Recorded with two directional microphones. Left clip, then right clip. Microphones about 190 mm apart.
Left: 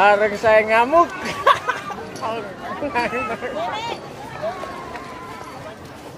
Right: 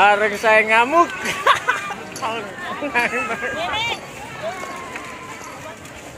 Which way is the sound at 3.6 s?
50° left (ahead or behind).